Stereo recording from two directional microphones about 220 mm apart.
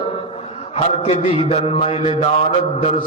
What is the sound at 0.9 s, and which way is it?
A man's voice, 25° left (ahead or behind).